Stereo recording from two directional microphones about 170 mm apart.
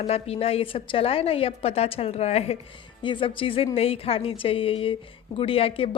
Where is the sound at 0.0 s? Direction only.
35° left (ahead or behind).